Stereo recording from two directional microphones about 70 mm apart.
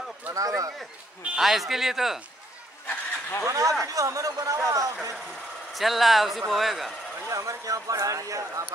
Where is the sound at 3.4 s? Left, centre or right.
Right.